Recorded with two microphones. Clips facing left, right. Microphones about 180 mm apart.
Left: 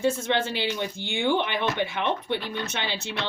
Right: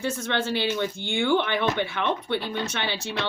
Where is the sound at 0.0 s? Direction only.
20° left (ahead or behind).